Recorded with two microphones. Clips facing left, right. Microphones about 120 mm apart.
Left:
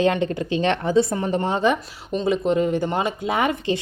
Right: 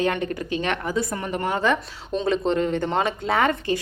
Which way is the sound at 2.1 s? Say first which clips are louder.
Left 2 dB; 5° left (ahead or behind).